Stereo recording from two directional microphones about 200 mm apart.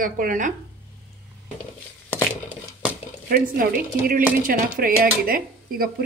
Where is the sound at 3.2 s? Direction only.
45° right (ahead or behind).